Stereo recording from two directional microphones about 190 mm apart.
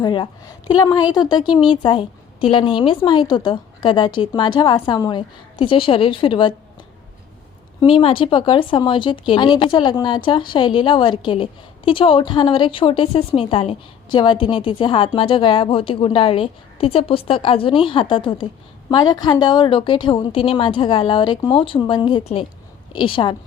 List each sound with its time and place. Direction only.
0.0 s a woman's voice: 25° left (ahead or behind)
7.8 s a woman's voice: 30° left (ahead or behind)